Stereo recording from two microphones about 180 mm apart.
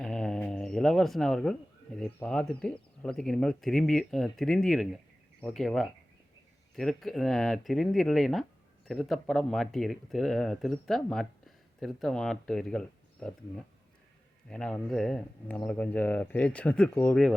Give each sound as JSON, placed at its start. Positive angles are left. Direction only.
{"t": 0.0, "sound": "a sound", "side_deg": 0}
{"t": 2.1, "sound": "speech", "side_deg": 5}
{"t": 14.5, "sound": "speech", "side_deg": 5}